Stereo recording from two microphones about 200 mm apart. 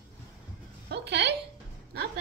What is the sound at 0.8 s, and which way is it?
Speech, 55° right (ahead or behind).